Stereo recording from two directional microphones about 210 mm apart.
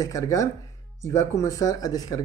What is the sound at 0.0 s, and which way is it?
A man's voice, 15° left (ahead or behind).